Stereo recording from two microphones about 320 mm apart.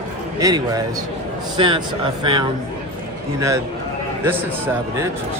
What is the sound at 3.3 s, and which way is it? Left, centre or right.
A man's voice, centre.